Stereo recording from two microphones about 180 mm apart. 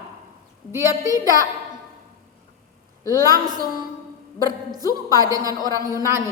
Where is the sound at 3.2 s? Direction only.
20° right (ahead or behind).